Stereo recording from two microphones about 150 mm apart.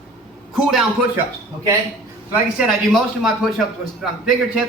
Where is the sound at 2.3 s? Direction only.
5° right (ahead or behind).